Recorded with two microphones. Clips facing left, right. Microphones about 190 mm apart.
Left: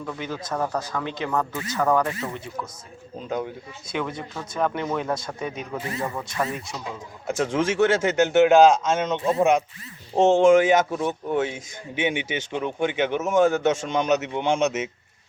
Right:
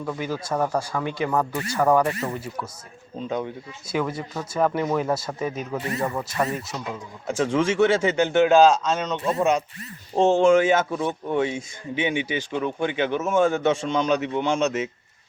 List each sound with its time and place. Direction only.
0.0 s speech: 10° right (ahead or behind)
3.2 s a man's voice: 5° left (ahead or behind)
8.5 s a man's voice: 20° left (ahead or behind)
12.5 s a man's voice: 15° left (ahead or behind)